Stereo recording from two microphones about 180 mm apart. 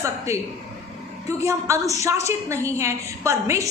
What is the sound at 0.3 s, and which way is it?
A woman's voice, 15° right (ahead or behind).